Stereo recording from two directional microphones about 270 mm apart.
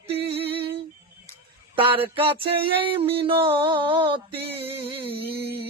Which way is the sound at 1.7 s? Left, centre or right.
Centre.